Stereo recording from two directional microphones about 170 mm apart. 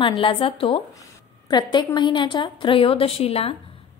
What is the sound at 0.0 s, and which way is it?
A woman's voice, 30° left (ahead or behind).